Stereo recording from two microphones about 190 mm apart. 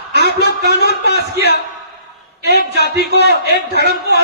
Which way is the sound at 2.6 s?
60° left (ahead or behind).